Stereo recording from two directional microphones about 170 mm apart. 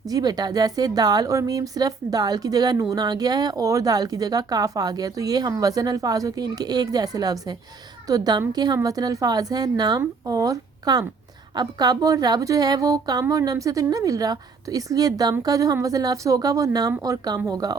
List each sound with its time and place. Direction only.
0.1 s a woman's voice: 20° right (ahead or behind)